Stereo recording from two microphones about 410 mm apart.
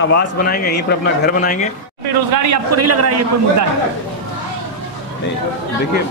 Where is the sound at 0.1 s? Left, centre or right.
Left.